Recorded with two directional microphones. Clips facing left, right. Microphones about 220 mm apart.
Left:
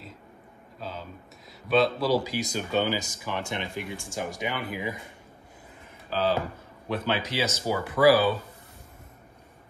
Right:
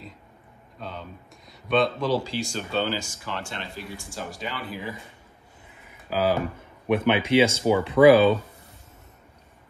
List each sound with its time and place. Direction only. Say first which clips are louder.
0.7 s a sound: even; 5° left (ahead or behind)
1.7 s speech: even; 5° left (ahead or behind)
6.0 s speech: right 3 dB; 10° right (ahead or behind)
7.1 s speech: right 9 dB; 25° right (ahead or behind)